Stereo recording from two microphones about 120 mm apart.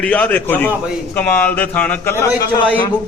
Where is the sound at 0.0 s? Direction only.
10° left (ahead or behind).